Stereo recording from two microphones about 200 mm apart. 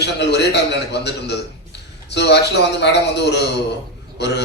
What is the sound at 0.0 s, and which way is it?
A man's voice, 60° left (ahead or behind).